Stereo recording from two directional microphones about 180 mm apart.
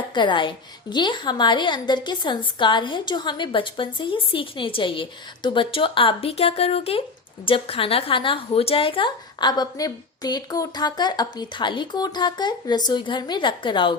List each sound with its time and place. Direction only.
0.1 s a woman's voice: 25° left (ahead or behind)